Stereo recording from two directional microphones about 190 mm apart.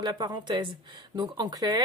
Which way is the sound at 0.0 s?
20° right (ahead or behind).